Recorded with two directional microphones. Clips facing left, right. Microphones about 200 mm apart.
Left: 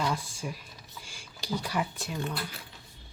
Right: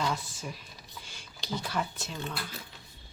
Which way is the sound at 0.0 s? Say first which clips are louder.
Left 1 dB; 10° left (ahead or behind).